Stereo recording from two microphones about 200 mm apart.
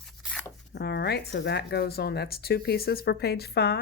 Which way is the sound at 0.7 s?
55° left (ahead or behind).